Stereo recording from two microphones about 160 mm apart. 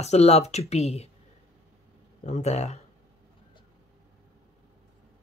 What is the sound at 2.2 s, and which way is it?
Speech, 45° left (ahead or behind).